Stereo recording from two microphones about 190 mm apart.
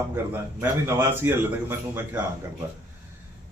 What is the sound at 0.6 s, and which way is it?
Speech, 10° right (ahead or behind).